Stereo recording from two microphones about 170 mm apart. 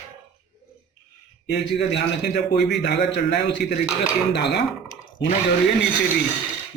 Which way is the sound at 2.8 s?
80° left.